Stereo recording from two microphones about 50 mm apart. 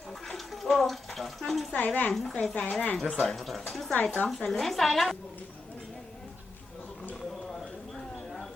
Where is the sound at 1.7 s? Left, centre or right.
Left.